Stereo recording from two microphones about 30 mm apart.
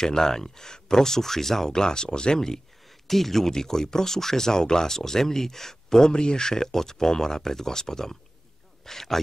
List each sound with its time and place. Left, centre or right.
0.0 s speech: centre
1.8 s speech: left
3.1 s speech: centre
6.1 s speech: left; by 9.2 s centre